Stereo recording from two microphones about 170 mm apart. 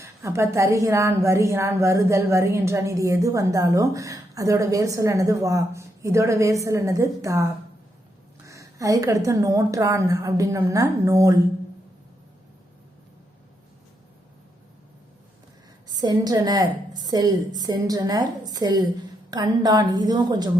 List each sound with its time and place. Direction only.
0.0 s a woman's voice: 15° right (ahead or behind)
16.0 s a woman's voice: 20° right (ahead or behind)